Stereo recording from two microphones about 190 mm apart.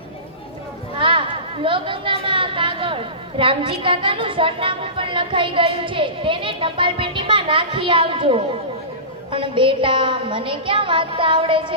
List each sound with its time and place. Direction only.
0.9 s a woman's voice: 25° right (ahead or behind)